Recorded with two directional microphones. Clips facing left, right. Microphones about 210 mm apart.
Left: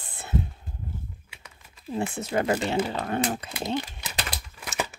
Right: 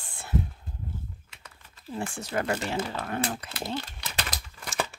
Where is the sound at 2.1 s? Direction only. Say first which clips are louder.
Left 4 dB; 25° left (ahead or behind).